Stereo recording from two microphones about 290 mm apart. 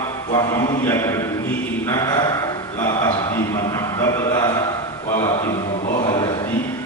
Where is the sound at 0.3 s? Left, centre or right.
Centre.